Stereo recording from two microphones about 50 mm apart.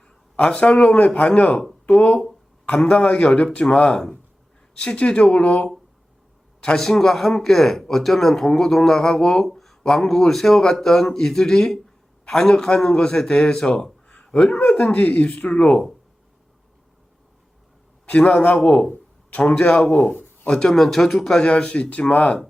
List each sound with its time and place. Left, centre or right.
0.4 s speech: centre
2.6 s speech: left
6.7 s a man's voice: centre
14.8 s speech: left
18.0 s a man's voice: left
20.5 s speech: centre
21.5 s speech: left